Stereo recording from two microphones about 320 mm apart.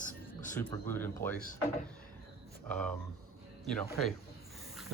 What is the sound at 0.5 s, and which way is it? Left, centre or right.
Speech, centre.